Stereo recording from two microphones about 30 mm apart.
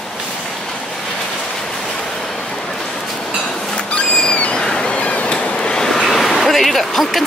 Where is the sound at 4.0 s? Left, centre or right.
Left.